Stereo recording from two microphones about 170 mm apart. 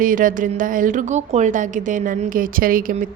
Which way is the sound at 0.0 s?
55° right (ahead or behind).